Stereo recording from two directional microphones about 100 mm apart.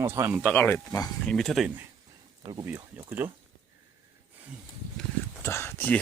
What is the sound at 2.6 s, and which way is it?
Speech, 20° right (ahead or behind).